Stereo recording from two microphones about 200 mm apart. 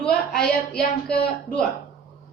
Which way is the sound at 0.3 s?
50° left (ahead or behind).